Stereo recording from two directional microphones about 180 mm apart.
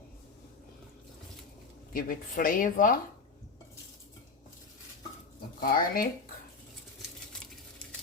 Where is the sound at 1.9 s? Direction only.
50° left (ahead or behind).